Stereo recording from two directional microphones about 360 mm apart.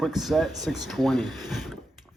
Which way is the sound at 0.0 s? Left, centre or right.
Centre.